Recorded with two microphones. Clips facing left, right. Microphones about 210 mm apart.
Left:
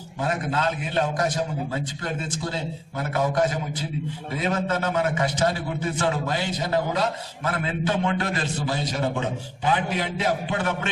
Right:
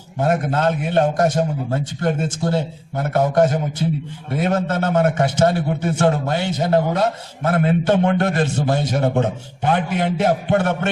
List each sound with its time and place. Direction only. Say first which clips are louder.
0.2 s a man's voice: right 7 dB; 45° right (ahead or behind)
5.5 s a man's voice: right 7 dB; 55° right (ahead or behind)